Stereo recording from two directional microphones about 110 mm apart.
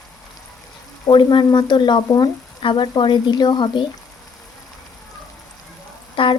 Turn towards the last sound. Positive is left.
turn(degrees=50)  # may be behind; listen again after turning